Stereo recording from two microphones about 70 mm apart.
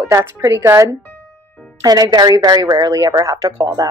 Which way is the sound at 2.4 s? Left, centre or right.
Right.